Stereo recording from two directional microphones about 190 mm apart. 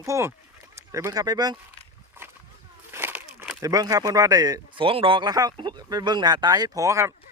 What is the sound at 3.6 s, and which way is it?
Speech, 20° right (ahead or behind).